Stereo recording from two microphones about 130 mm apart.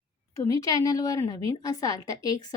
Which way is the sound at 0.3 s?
25° left (ahead or behind).